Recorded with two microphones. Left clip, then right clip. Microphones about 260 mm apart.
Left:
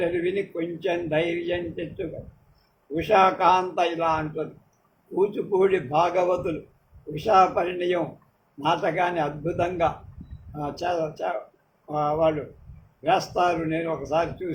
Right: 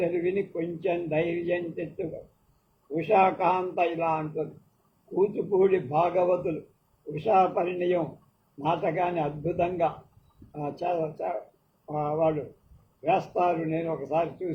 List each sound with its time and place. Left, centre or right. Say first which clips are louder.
0.0 s speech: left 2 dB; left